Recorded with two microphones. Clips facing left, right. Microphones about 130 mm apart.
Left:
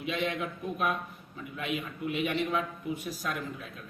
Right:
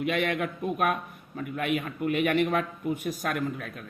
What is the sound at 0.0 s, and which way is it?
A man's voice, 60° right (ahead or behind).